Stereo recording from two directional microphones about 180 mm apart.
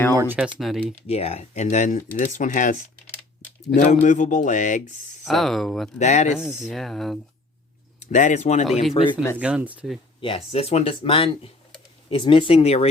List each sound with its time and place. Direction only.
0.1 s speech: 15° right (ahead or behind)
1.0 s speech: 35° left (ahead or behind)
3.8 s speech: 45° left (ahead or behind)
5.2 s speech: centre (ahead or behind)
6.0 s speech: 40° left (ahead or behind)
6.7 s speech: centre (ahead or behind)
7.9 s speech: 45° left (ahead or behind)
9.4 s speech: 5° right (ahead or behind)
10.2 s speech: 30° left (ahead or behind)